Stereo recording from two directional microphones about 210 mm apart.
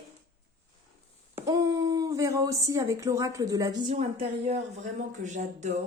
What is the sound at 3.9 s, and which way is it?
Speech, 30° right (ahead or behind).